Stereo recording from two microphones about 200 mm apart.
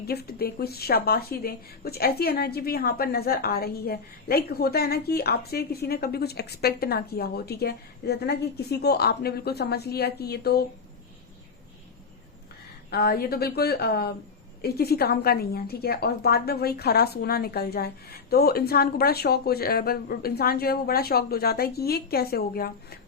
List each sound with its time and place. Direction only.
0.0 s a woman's voice: 50° left (ahead or behind)
12.9 s a woman's voice: 50° left (ahead or behind)